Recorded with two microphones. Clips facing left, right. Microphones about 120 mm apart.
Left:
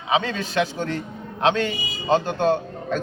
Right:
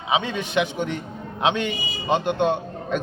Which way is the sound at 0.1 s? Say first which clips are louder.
Even; 15° right (ahead or behind).